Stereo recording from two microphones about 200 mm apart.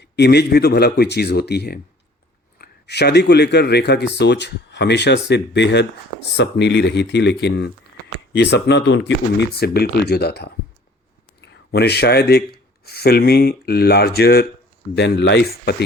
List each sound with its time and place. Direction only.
0.0 s speech: 55° left (ahead or behind)